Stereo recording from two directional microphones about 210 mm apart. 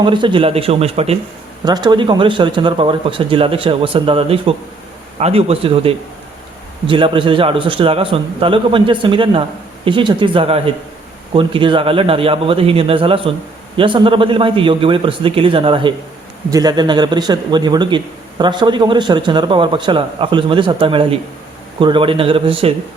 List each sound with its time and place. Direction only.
0.0 s a man's voice: 20° right (ahead or behind)